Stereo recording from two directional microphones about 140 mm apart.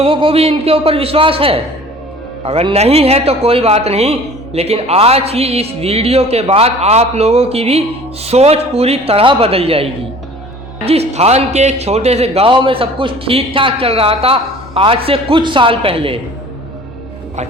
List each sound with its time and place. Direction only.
0.0 s a man's voice: 40° right (ahead or behind)